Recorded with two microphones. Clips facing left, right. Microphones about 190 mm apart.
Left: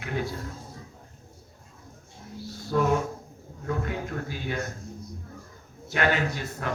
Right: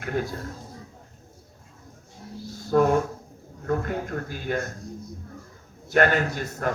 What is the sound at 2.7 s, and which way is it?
A man's voice, 45° right (ahead or behind).